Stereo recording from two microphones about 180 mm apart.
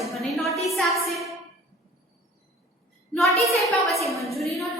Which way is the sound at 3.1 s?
Centre (ahead or behind).